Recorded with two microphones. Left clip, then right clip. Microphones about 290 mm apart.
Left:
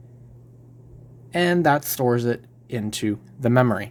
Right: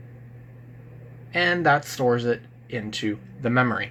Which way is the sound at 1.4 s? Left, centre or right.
Left.